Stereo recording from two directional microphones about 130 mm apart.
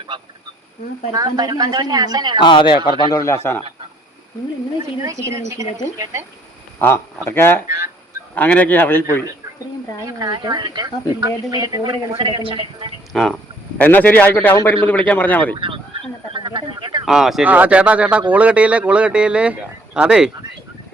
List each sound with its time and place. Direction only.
0.1 s a woman's voice: 35° right (ahead or behind)
2.4 s speech: 35° left (ahead or behind)
3.0 s speech: 25° left (ahead or behind)
5.0 s speech: 20° right (ahead or behind)
6.7 s speech: 20° left (ahead or behind)
10.2 s a woman's voice: 30° right (ahead or behind)
12.1 s speech: 45° right (ahead or behind)
13.1 s speech: centre (ahead or behind)
15.5 s a woman's voice: 40° right (ahead or behind)
16.3 s a sound: 35° right (ahead or behind)
17.1 s speech: 5° right (ahead or behind)